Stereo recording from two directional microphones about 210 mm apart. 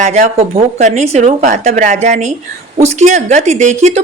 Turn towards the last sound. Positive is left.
turn(degrees=-35)  # may be behind; listen again after turning